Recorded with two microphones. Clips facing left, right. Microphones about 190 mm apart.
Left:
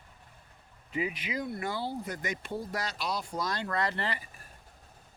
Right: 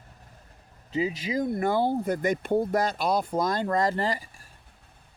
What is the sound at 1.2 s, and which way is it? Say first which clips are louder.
Speech: right 8 dB; 45° right (ahead or behind).